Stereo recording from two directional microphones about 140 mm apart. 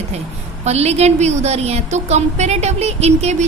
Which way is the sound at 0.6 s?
50° right (ahead or behind).